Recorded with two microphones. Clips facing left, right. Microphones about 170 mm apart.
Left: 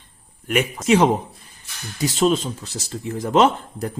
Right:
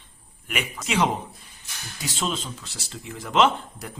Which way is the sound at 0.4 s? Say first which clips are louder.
Left 10 dB; 45° left (ahead or behind).